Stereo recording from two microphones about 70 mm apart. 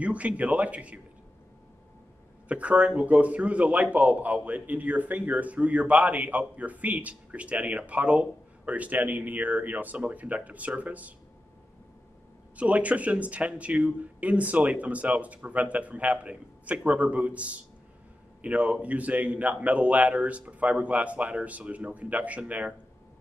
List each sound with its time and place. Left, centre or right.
0.0 s a man's voice: centre
2.4 s a man's voice: centre
12.5 s a man's voice: centre